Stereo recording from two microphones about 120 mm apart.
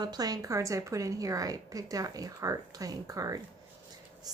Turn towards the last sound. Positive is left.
turn(degrees=-30)  # may be behind; listen again after turning